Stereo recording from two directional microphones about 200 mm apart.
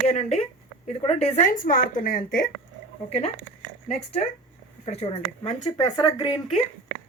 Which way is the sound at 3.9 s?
30° left (ahead or behind).